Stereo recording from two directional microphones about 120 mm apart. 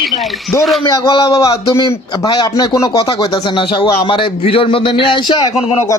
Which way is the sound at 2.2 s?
35° left (ahead or behind).